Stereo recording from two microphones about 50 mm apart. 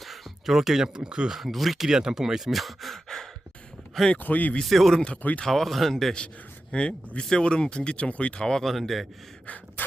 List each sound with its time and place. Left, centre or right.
0.0 s a sound: centre
0.9 s speech: centre
1.4 s speech: centre
1.9 s speech: centre
4.2 s speech: left
4.6 s speech: centre
6.1 s a man's voice: left
8.6 s speech: centre